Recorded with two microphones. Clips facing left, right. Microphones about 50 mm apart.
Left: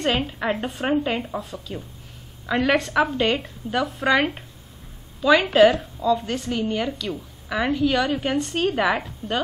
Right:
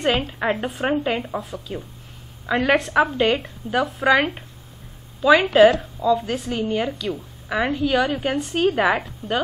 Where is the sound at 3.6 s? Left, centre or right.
Centre.